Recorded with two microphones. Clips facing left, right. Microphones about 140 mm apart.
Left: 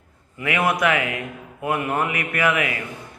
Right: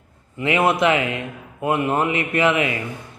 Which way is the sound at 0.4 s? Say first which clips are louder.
Right 3 dB; 25° right (ahead or behind).